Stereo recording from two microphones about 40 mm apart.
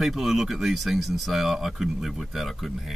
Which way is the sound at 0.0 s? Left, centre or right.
Centre.